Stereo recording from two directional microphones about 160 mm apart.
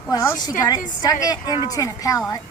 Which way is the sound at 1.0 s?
25° left (ahead or behind).